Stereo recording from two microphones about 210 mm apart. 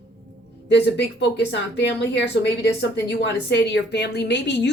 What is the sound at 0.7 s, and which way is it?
Speech, 55° left (ahead or behind).